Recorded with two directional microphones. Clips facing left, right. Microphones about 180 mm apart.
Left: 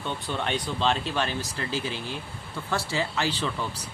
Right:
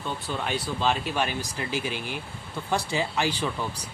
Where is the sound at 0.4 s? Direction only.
5° right (ahead or behind).